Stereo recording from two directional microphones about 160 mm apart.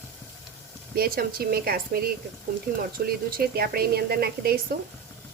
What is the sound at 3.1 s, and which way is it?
Speech, 70° right (ahead or behind).